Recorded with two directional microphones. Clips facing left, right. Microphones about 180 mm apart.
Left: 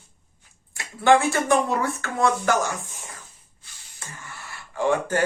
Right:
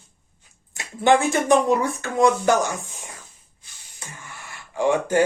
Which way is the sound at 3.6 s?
15° right (ahead or behind).